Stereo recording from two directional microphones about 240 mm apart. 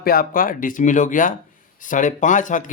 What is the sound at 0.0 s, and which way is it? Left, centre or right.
Speech, left.